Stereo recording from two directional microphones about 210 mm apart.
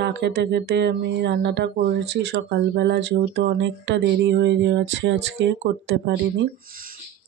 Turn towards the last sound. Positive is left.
turn(degrees=-60)  # may be behind; listen again after turning